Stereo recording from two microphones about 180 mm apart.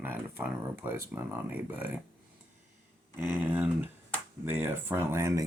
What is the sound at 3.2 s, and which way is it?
Speech, 10° right (ahead or behind).